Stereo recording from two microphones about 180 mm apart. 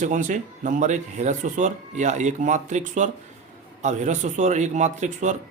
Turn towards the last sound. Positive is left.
turn(degrees=-40)  # may be behind; listen again after turning